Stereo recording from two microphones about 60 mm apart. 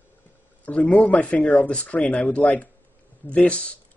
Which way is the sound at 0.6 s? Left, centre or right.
Left.